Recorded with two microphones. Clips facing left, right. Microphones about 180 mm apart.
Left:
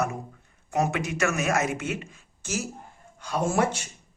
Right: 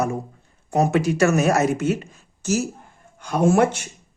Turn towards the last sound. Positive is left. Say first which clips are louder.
# right 7 dB
turn(degrees=-60)  # may be behind; listen again after turning